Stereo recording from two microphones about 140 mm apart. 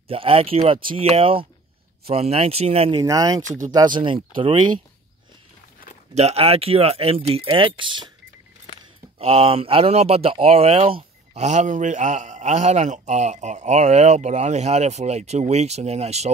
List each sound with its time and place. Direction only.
0.1 s speech: 45° right (ahead or behind)
3.0 s speech: 25° right (ahead or behind)
6.1 s speech: 45° right (ahead or behind)
9.2 s speech: 45° right (ahead or behind)